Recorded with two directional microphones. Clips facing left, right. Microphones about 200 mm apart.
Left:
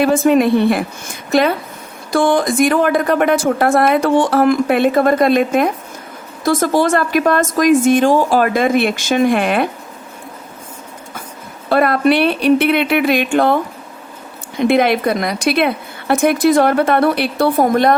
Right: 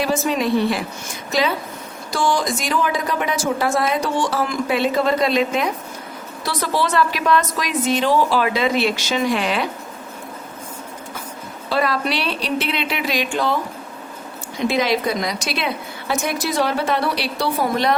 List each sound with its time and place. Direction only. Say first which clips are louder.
0.0 s a woman's voice: left 8 dB; 55° left (ahead or behind)
11.7 s speech: left 8 dB; 55° left (ahead or behind)
14.7 s speech: left 6 dB; 55° left (ahead or behind)